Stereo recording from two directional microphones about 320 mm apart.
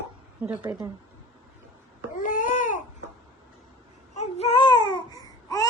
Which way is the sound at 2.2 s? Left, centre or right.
Left.